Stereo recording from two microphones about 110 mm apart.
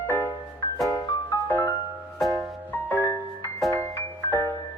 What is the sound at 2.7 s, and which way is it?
Music, 20° left (ahead or behind).